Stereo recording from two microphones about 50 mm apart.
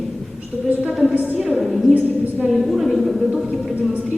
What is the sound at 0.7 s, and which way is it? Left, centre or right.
Speech, right.